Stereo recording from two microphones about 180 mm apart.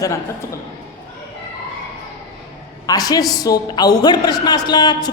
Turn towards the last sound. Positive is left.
turn(degrees=25)  # may be behind; listen again after turning